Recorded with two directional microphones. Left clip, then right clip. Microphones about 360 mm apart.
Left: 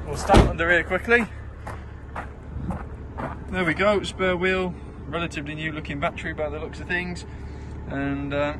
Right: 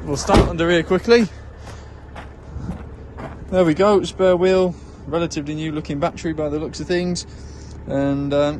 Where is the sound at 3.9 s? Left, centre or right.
Centre.